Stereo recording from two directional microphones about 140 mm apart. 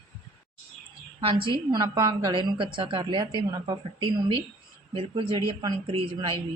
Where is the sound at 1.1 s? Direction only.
40° right (ahead or behind).